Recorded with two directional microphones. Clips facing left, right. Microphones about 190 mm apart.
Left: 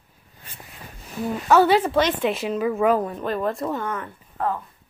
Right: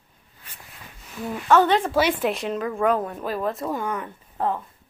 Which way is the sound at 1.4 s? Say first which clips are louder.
Left 1 dB; 10° left (ahead or behind).